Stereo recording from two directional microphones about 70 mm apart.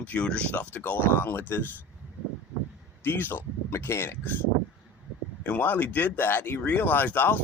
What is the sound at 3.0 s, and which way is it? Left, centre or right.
Speech, left.